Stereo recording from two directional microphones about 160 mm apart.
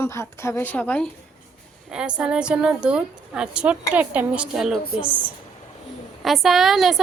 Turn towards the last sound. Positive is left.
turn(degrees=0)  # may be behind; listen again after turning